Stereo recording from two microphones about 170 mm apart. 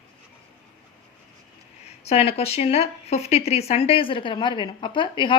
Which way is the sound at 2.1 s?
35° left (ahead or behind).